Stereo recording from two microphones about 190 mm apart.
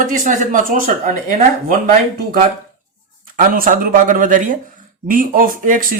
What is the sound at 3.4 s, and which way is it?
Speech, 45° right (ahead or behind).